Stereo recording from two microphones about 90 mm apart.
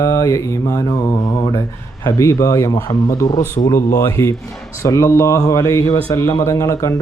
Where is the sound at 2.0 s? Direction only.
35° left (ahead or behind).